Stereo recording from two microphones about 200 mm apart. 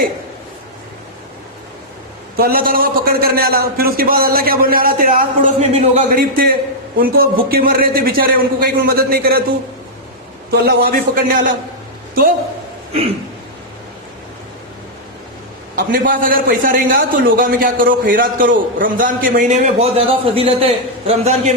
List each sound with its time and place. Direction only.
2.3 s a man's voice: 50° right (ahead or behind)
10.5 s a man's voice: 55° right (ahead or behind)
15.7 s a man's voice: 45° right (ahead or behind)